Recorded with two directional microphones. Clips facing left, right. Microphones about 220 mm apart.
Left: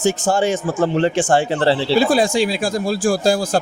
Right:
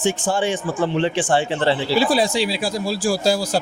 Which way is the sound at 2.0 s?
50° left (ahead or behind).